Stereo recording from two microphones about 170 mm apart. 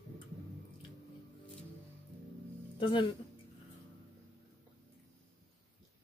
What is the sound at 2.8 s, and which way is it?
Speech, 30° left (ahead or behind).